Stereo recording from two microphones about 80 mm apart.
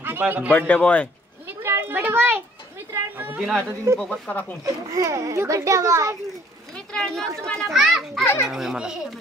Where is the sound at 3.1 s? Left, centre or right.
Right.